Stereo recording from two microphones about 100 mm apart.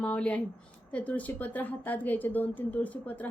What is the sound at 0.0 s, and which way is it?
A woman's voice, 10° left (ahead or behind).